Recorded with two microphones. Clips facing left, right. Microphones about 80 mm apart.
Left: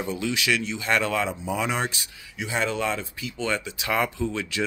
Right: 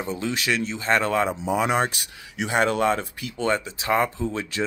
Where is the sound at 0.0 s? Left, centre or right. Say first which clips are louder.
Even; right.